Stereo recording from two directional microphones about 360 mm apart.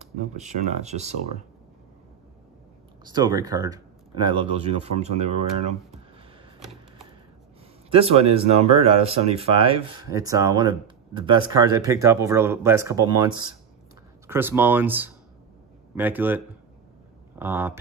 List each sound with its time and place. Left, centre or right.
0.0 s speech: centre
3.0 s speech: centre
7.9 s speech: centre